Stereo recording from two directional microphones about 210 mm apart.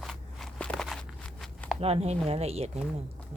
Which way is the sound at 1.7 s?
30° right (ahead or behind).